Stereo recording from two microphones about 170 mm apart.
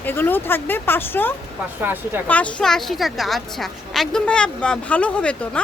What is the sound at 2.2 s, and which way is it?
A woman's voice, 10° left (ahead or behind).